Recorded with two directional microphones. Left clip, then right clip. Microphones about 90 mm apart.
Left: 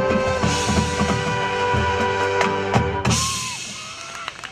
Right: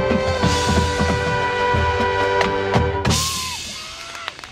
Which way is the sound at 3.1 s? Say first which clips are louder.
Right 1 dB; 55° left (ahead or behind).